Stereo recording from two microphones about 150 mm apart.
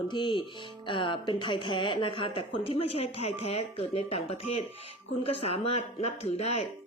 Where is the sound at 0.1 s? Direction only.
30° left (ahead or behind).